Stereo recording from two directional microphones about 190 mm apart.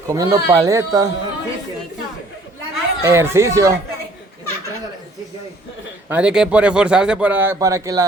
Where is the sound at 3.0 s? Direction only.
15° right (ahead or behind).